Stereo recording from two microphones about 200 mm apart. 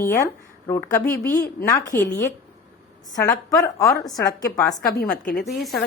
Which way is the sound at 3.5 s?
15° left (ahead or behind).